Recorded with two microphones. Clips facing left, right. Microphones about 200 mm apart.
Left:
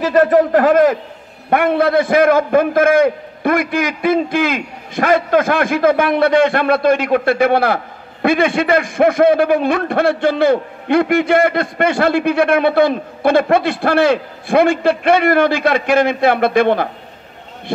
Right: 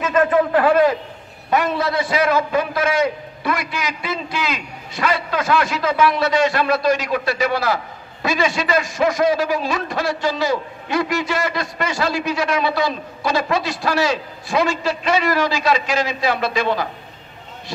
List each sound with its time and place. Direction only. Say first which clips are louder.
0.0 s a man's voice: left 5 dB; 40° left (ahead or behind)
1.5 s a man's voice: left 6 dB; 60° left (ahead or behind)